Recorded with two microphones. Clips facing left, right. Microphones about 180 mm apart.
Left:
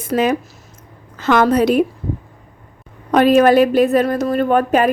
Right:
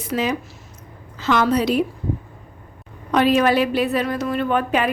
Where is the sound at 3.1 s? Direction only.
45° left (ahead or behind).